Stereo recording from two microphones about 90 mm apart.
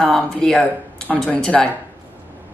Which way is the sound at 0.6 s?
15° left (ahead or behind).